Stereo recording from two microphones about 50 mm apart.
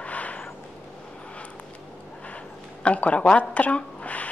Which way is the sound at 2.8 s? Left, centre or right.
Left.